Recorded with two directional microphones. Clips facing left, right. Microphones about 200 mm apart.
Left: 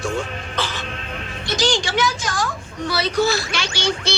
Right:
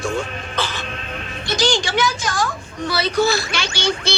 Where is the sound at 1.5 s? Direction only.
55° right (ahead or behind).